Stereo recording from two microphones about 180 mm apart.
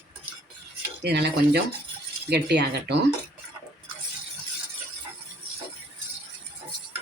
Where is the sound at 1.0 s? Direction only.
65° right (ahead or behind).